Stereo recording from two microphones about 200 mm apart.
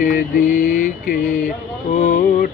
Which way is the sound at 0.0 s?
40° left (ahead or behind).